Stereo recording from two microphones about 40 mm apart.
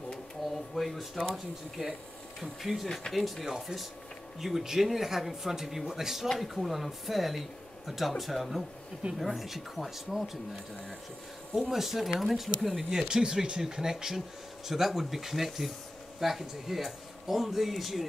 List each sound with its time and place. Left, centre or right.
0.7 s speech: centre
11.7 s speech: centre
13.1 s speech: centre